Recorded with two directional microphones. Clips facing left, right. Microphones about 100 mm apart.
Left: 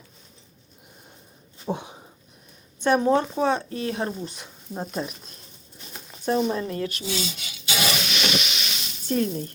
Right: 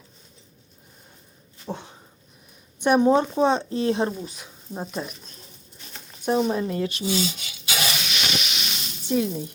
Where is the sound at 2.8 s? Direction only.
20° right (ahead or behind).